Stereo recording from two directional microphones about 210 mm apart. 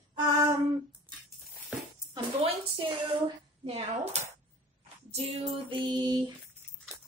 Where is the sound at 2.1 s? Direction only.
25° right (ahead or behind).